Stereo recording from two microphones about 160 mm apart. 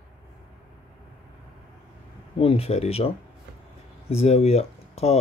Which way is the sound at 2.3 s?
35° left (ahead or behind).